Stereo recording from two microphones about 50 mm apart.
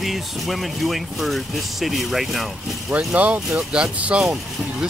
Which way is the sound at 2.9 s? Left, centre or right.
Right.